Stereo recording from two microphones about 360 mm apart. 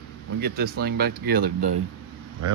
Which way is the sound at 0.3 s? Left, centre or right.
Right.